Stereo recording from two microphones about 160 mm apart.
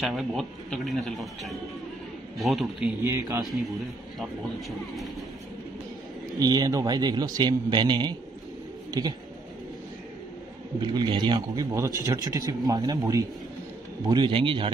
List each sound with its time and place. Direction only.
0.0 s a man's voice: centre (ahead or behind)
3.0 s a man's voice: 15° right (ahead or behind)
3.4 s a man's voice: centre (ahead or behind)
6.4 s a man's voice: 25° right (ahead or behind)
10.8 s a man's voice: 30° right (ahead or behind)